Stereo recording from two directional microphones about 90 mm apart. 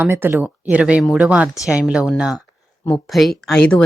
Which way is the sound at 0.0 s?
25° right (ahead or behind).